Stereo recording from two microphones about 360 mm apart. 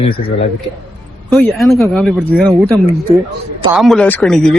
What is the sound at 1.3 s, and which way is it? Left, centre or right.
A woman's voice, centre.